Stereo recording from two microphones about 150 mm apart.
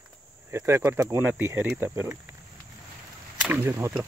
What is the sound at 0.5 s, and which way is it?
Speech, 15° right (ahead or behind).